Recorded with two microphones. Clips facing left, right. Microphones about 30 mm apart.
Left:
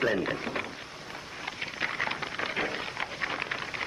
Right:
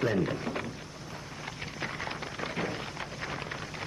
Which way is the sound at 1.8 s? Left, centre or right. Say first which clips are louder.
Left 5 dB; left.